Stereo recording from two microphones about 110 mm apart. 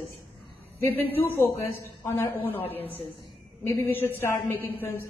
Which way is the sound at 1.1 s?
25° left (ahead or behind).